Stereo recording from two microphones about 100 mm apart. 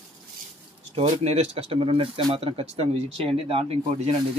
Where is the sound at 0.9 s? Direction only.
90° right; by 3.7 s 70° right (ahead or behind).